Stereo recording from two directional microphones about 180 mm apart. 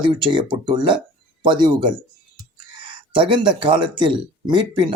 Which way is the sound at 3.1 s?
25° right (ahead or behind).